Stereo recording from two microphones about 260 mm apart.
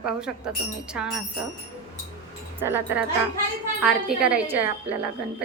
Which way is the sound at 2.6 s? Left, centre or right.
Centre.